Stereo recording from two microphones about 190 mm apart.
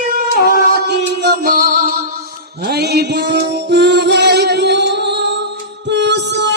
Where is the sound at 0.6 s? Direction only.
55° right (ahead or behind).